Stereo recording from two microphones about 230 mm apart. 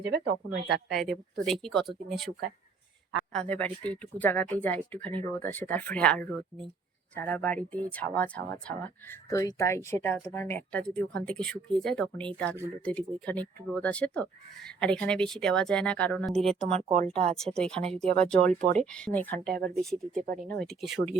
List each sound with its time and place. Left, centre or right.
0.0 s speech: right
0.7 s speech: centre
16.5 s speech: right
17.3 s speech: centre
19.5 s speech: right
19.7 s speech: centre
20.1 s speech: right